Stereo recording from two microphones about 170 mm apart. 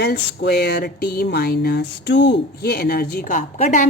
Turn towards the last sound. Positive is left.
turn(degrees=50)  # may be behind; listen again after turning